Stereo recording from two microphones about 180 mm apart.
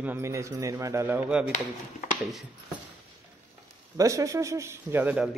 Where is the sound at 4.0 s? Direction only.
20° right (ahead or behind).